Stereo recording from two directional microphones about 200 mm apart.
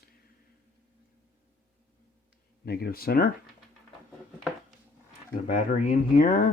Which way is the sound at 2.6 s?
50° left (ahead or behind).